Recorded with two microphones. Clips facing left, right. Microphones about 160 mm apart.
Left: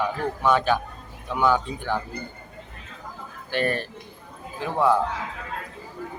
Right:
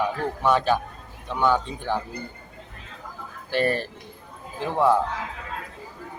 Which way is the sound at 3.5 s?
35° right (ahead or behind).